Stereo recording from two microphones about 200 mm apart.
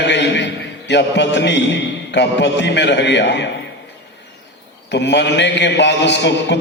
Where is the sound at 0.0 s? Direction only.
60° left (ahead or behind).